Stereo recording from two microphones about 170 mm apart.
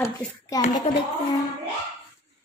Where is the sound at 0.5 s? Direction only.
20° left (ahead or behind).